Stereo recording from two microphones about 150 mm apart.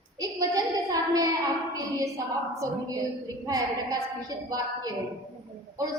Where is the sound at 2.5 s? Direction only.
20° right (ahead or behind).